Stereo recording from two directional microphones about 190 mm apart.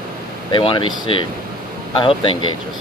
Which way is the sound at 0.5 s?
25° left (ahead or behind).